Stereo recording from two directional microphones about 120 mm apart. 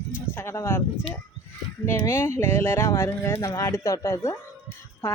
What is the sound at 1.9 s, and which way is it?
Speech, 20° left (ahead or behind).